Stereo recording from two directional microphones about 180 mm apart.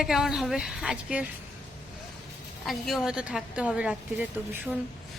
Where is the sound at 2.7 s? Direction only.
Centre (ahead or behind).